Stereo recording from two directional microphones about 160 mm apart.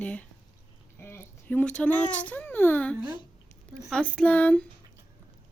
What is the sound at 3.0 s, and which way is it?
Speech, 30° left (ahead or behind).